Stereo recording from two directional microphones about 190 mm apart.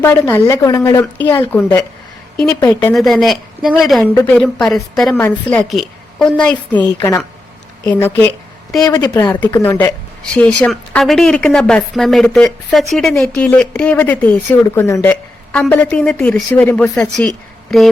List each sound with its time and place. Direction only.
0.0 s a woman's voice: 10° left (ahead or behind)
2.9 s a woman's voice: centre (ahead or behind)
4.1 s a woman's voice: 10° left (ahead or behind)
6.8 s a woman's voice: 15° left (ahead or behind)